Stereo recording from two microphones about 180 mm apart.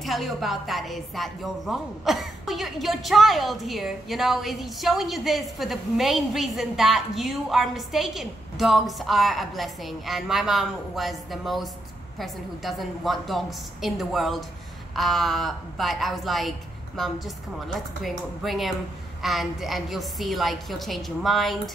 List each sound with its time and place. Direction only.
0.0 s a woman's voice: centre (ahead or behind)